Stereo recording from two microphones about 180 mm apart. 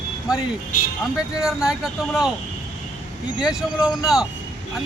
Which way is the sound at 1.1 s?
5° right (ahead or behind).